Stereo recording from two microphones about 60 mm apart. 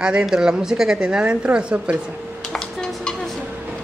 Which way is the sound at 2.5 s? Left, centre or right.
Centre.